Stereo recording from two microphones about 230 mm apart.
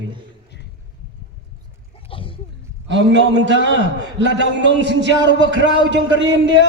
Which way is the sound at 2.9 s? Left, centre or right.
Right.